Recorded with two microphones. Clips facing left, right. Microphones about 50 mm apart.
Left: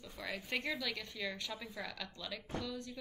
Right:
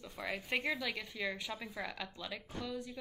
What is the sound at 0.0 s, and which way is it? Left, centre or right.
A woman's voice, centre.